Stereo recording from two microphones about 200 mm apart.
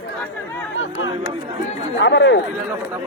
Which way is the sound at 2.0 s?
60° left (ahead or behind).